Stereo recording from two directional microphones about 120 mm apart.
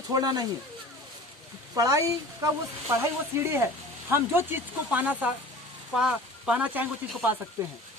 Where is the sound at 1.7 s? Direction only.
25° right (ahead or behind); by 6.8 s 10° right (ahead or behind).